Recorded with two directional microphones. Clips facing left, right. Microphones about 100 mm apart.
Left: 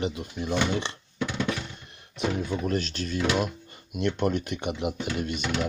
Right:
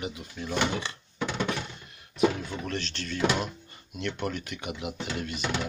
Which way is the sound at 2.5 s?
15° left (ahead or behind).